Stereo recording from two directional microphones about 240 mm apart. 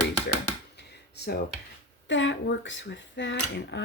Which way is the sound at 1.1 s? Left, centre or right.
Left.